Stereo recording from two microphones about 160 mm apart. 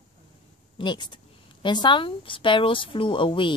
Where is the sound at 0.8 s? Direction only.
30° left (ahead or behind).